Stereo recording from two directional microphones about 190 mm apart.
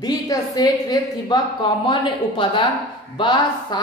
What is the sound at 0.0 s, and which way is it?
A woman's voice, 20° left (ahead or behind).